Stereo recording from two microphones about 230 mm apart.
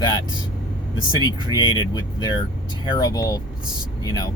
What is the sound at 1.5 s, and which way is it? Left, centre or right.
Speech, centre.